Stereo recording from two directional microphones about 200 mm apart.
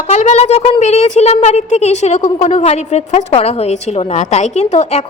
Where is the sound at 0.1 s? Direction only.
35° left (ahead or behind).